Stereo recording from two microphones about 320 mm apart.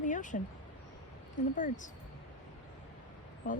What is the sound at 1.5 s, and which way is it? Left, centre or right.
Speech, left.